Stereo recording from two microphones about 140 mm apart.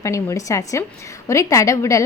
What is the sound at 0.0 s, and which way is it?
A woman's voice, 20° left (ahead or behind).